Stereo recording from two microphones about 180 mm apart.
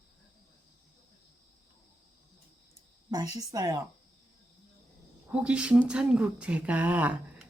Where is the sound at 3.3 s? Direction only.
20° right (ahead or behind).